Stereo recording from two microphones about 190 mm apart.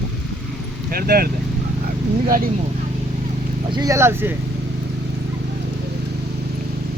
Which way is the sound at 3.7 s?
20° right (ahead or behind).